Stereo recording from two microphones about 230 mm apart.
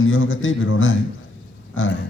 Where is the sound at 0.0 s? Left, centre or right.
Left.